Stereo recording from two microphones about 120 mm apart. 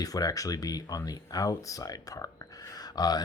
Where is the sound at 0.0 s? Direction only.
30° left (ahead or behind).